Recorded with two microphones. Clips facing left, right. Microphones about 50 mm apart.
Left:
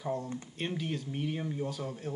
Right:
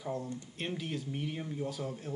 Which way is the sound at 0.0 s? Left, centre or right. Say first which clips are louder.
Left 3 dB; centre.